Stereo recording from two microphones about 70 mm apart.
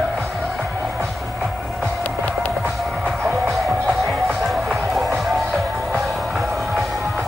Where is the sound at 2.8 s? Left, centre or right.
Centre.